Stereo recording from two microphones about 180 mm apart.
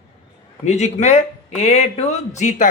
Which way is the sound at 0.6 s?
40° left (ahead or behind).